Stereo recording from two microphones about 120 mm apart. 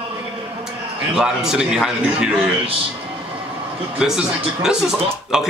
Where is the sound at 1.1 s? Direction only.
5° right (ahead or behind).